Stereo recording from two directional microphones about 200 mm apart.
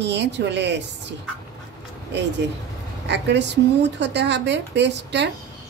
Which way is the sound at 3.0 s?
60° right (ahead or behind).